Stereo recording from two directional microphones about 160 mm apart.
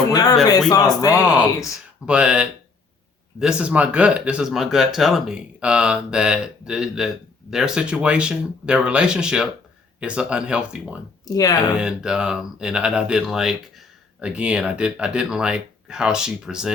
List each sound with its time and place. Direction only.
0.1 s speech: 25° left (ahead or behind)
2.0 s speech: 5° right (ahead or behind)
11.3 s speech: 20° left (ahead or behind)
11.8 s speech: 5° right (ahead or behind)